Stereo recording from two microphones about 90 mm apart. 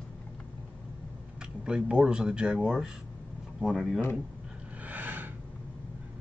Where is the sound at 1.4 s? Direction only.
10° right (ahead or behind).